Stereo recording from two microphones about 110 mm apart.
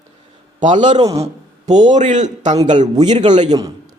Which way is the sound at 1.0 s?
70° right (ahead or behind).